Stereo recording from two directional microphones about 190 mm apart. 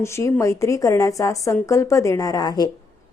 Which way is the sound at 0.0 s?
15° left (ahead or behind).